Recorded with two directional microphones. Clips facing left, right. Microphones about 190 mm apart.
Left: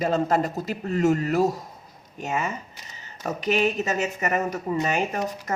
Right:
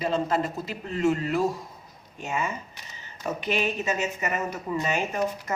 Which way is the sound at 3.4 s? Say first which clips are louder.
Left 5 dB; 40° left (ahead or behind).